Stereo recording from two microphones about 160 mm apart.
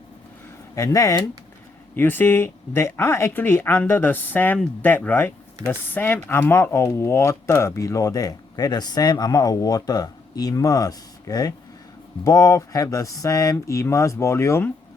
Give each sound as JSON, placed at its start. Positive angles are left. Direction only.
{"t": 0.8, "sound": "speech", "side_deg": 20}